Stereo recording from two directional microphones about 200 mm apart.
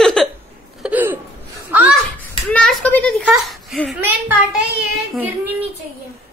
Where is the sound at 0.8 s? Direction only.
10° right (ahead or behind).